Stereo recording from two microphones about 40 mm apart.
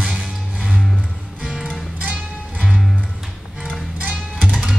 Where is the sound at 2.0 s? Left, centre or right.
Right.